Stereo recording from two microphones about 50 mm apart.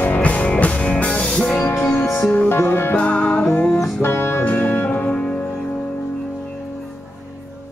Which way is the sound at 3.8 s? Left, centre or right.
Centre.